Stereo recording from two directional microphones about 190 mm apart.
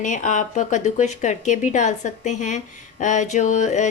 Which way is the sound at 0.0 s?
40° left (ahead or behind).